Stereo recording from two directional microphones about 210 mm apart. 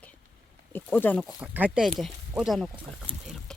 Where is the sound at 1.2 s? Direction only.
5° right (ahead or behind).